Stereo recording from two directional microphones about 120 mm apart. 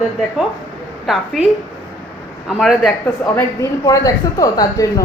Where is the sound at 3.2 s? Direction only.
30° left (ahead or behind).